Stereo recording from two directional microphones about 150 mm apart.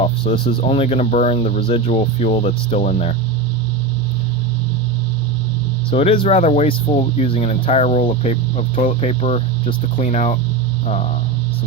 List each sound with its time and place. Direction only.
0.0 s speech: 40° left (ahead or behind)
5.9 s speech: 40° left (ahead or behind)